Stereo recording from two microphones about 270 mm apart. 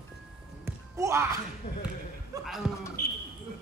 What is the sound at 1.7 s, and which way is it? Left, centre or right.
Speech, left.